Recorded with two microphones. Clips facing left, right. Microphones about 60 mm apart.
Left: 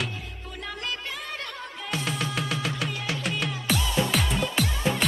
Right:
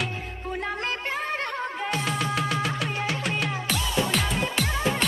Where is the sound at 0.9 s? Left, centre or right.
Right.